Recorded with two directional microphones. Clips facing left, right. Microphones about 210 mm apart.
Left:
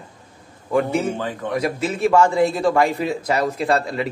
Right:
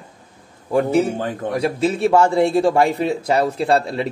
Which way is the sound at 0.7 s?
40° right (ahead or behind).